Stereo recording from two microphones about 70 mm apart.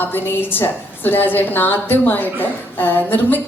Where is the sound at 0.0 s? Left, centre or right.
Left.